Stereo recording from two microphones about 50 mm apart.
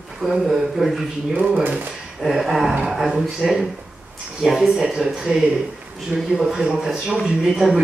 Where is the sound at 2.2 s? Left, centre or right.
Centre.